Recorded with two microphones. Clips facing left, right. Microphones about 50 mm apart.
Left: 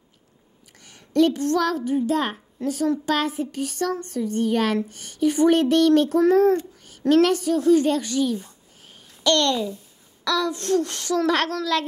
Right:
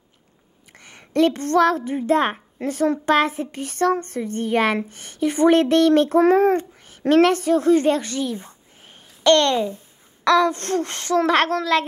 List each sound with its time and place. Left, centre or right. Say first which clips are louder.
0.7 s a woman's voice: even; right